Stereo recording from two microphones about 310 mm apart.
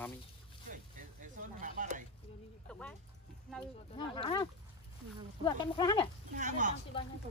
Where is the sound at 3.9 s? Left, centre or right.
Centre.